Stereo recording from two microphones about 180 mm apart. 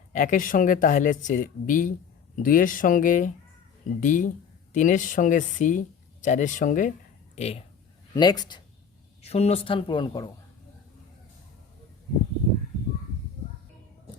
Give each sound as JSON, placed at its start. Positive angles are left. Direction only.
{"t": 0.1, "sound": "speech", "side_deg": 45}
{"t": 8.1, "sound": "speech", "side_deg": 20}
{"t": 9.2, "sound": "speech", "side_deg": 35}